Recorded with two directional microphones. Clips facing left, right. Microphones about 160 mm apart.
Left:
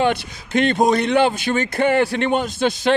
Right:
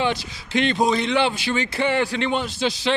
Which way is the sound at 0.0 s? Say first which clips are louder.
Left 4 dB; 55° left (ahead or behind).